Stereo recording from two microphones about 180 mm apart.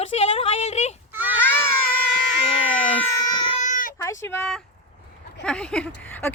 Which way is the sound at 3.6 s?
45° left (ahead or behind).